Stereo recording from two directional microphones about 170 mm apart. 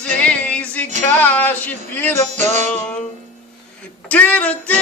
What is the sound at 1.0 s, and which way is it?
Speech, 10° left (ahead or behind).